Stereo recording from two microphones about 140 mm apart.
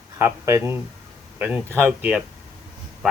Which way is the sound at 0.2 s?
20° right (ahead or behind).